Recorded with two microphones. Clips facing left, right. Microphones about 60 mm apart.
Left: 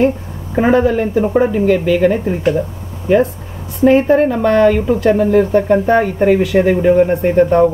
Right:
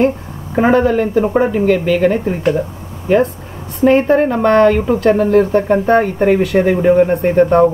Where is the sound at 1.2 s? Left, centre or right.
Centre.